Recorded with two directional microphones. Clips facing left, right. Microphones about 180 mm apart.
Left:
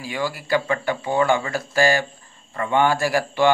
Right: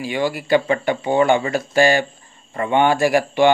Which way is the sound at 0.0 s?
20° right (ahead or behind).